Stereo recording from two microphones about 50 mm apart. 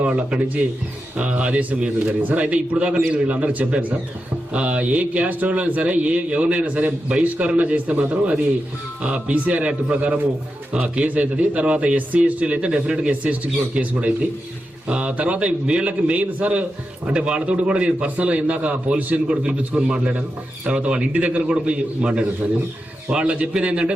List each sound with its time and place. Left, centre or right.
0.0 s a man's voice: right
19.3 s speech: centre